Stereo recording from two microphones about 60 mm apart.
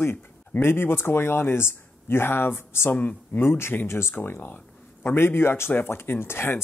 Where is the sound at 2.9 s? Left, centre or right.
Left.